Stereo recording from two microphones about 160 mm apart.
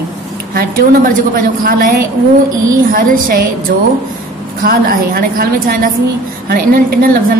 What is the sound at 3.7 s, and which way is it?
Speech, 80° right.